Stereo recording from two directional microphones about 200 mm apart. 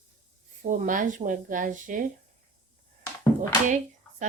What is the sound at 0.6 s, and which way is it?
Speech, 40° right (ahead or behind).